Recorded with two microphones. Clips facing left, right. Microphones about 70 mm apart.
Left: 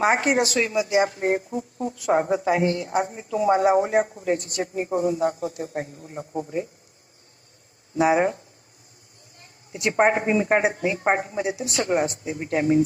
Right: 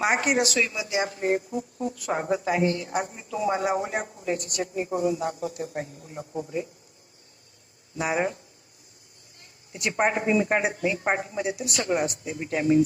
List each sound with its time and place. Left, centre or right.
0.3 s speech: left
1.5 s a woman's voice: left
2.9 s a woman's voice: left
7.9 s a woman's voice: left
10.0 s a woman's voice: left